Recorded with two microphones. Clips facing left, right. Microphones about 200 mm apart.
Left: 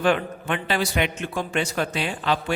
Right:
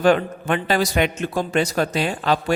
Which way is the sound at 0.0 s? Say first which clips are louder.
Right 5 dB; 40° right (ahead or behind).